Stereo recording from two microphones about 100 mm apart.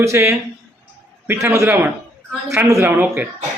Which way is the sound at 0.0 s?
30° right (ahead or behind).